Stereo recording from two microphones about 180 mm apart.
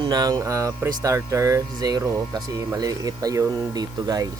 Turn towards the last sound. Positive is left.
turn(degrees=-20)  # may be behind; listen again after turning